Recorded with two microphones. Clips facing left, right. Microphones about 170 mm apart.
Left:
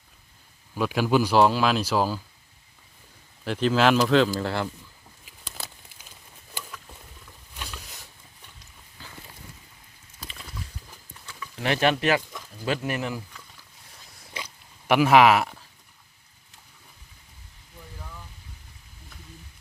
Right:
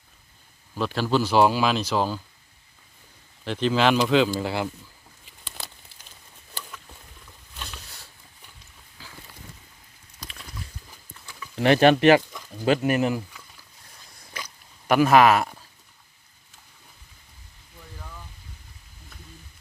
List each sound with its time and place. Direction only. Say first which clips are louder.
0.8 s speech: left 1 dB; 10° left (ahead or behind)
1.4 s speech: right 2 dB; centre (ahead or behind)
3.4 s speech: even; 5° left (ahead or behind)
5.2 s a sound: left 1 dB; 5° left (ahead or behind)
9.0 s boat: left 1 dB; 5° right (ahead or behind)
10.2 s wild animals: even; centre (ahead or behind)
11.5 s speech: right 6 dB; 35° right (ahead or behind)
12.8 s speech: right 7 dB; 20° right (ahead or behind)
14.8 s speech: even; 5° left (ahead or behind)